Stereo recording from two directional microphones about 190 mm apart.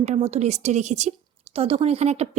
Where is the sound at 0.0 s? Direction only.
35° right (ahead or behind).